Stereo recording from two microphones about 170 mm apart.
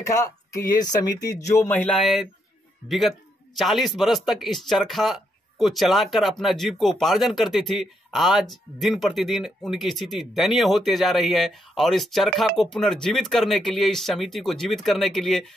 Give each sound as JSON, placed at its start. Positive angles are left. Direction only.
{"t": 0.0, "sound": "a man's voice", "side_deg": 20}